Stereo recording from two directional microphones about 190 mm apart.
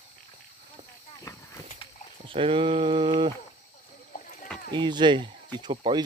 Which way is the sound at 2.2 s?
30° right (ahead or behind).